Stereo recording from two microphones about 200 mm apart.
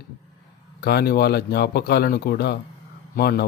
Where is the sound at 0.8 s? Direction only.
50° left (ahead or behind).